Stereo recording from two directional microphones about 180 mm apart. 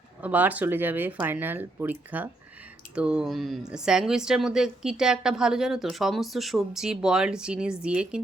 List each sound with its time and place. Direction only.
0.2 s speech: 10° right (ahead or behind)